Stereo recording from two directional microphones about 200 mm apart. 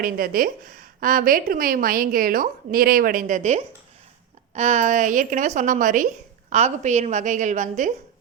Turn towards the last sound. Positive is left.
turn(degrees=-40)  # may be behind; listen again after turning